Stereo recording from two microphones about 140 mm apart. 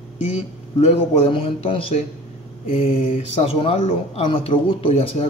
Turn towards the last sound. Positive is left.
turn(degrees=45)  # may be behind; listen again after turning